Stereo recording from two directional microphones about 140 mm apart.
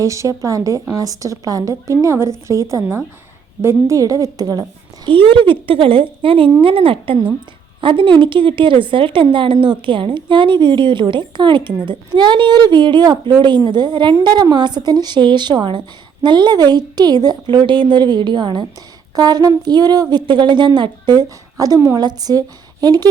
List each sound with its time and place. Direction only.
0.0 s speech: 25° right (ahead or behind)
5.0 s a woman's voice: 40° right (ahead or behind)